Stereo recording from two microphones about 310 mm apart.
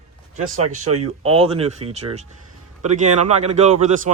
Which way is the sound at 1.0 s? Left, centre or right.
Centre.